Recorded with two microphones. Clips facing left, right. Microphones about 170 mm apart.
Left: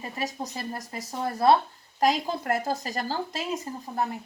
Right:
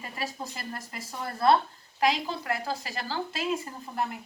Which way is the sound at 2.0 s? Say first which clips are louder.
Left 3 dB; 45° left (ahead or behind).